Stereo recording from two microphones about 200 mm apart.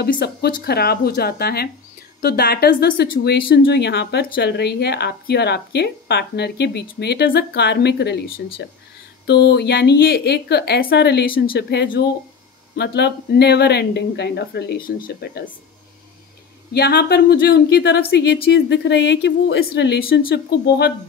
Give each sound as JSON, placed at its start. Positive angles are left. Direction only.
{"t": 0.0, "sound": "a woman's voice", "side_deg": 50}
{"t": 16.7, "sound": "speech", "side_deg": 55}